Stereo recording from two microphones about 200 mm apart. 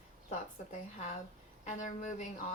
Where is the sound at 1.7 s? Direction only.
40° left (ahead or behind).